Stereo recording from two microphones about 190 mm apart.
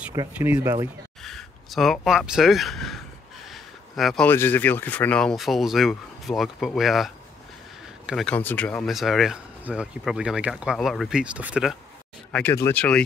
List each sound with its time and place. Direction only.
0.1 s speech: 20° right (ahead or behind)
1.2 s speech: centre (ahead or behind)
8.1 s speech: centre (ahead or behind)
12.3 s speech: 10° left (ahead or behind)